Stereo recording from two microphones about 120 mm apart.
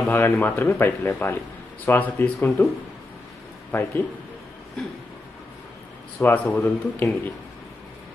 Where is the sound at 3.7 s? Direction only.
20° left (ahead or behind).